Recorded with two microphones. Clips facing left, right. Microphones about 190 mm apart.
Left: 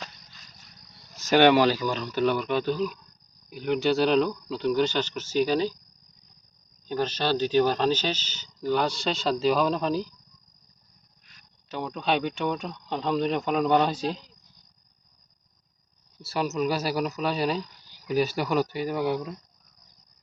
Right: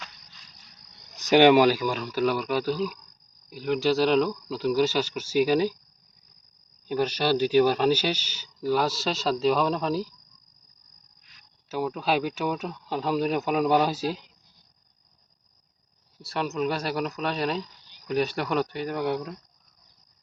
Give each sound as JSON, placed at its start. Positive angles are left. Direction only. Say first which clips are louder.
{"t": 0.0, "sound": "cricket", "louder": "left 4 dB", "side_deg": 45}
{"t": 0.9, "sound": "speech", "louder": "right 2 dB", "side_deg": -20}
{"t": 6.8, "sound": "speech", "louder": "right 2 dB", "side_deg": -10}
{"t": 11.7, "sound": "speech", "louder": "right 1 dB", "side_deg": -5}
{"t": 16.2, "sound": "speech", "louder": "left 1 dB", "side_deg": 0}